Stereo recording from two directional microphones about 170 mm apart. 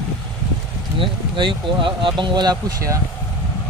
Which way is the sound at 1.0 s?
30° right (ahead or behind).